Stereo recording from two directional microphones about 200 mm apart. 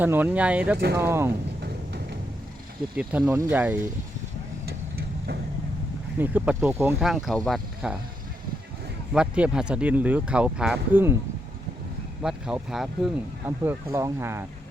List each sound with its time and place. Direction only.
0.0 s speech: 10° right (ahead or behind)
1.6 s music: 55° right (ahead or behind)
2.9 s speech: 5° right (ahead or behind)
4.6 s vehicle: 50° right (ahead or behind)
6.1 s speech: 10° right (ahead or behind)
7.1 s speech: centre (ahead or behind)
9.1 s speech: 5° right (ahead or behind)
12.2 s speech: 5° right (ahead or behind)